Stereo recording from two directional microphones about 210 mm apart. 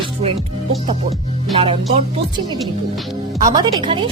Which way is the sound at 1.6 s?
25° right (ahead or behind).